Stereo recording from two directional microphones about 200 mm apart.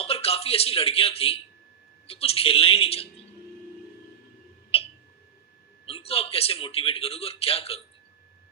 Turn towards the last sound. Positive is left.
turn(degrees=30)  # may be behind; listen again after turning